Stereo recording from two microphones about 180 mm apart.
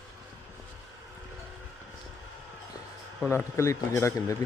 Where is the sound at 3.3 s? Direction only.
15° left (ahead or behind).